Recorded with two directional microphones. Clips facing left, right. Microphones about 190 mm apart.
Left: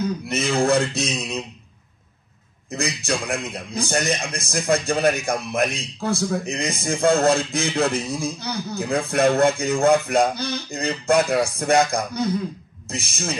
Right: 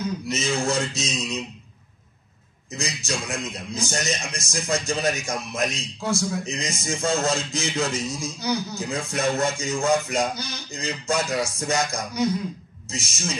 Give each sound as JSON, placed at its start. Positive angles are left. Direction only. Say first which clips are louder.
{"t": 0.3, "sound": "a man's voice", "louder": "left 6 dB", "side_deg": 60}
{"t": 2.7, "sound": "a man's voice", "louder": "left 5 dB", "side_deg": 55}